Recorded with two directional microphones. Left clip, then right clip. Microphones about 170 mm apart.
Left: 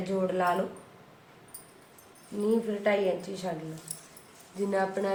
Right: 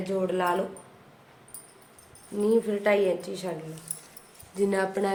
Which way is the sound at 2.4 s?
60° right (ahead or behind).